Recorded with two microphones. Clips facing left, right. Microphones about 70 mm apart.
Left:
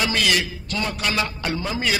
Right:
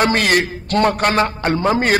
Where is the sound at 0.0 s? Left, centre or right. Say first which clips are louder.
Right 7 dB; right.